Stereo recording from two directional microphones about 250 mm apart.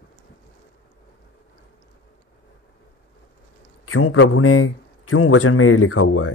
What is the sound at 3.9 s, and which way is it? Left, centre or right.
A man's voice, left.